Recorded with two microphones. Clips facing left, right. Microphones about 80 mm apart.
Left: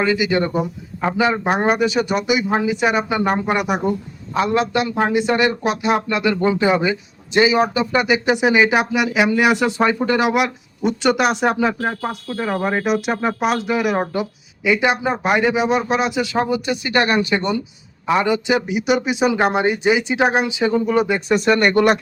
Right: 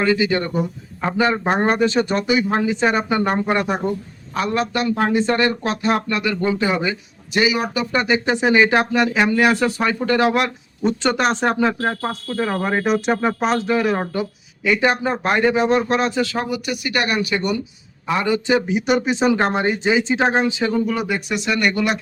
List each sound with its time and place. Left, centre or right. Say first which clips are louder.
0.0 s a man's voice: even; centre
4.9 s speech: even; centre
20.9 s a man's voice: left 5 dB; left
21.3 s speech: left 6 dB; left